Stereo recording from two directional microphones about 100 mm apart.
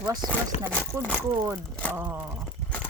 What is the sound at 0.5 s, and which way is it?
Speech, 90° left.